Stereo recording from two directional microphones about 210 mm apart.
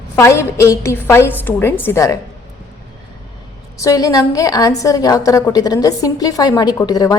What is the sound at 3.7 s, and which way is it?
A woman's voice, 15° left (ahead or behind).